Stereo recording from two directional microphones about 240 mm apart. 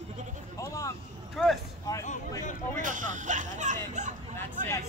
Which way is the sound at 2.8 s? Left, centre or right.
Right.